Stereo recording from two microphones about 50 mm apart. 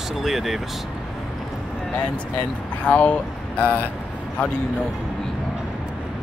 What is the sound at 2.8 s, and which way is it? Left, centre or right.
Speech, left.